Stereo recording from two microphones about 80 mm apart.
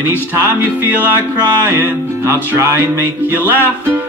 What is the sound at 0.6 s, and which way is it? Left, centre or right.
Music, right.